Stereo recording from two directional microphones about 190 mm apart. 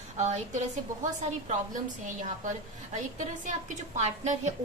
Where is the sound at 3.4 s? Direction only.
40° right (ahead or behind).